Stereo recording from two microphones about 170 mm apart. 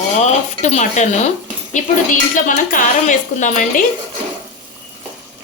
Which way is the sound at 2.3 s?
50° left (ahead or behind).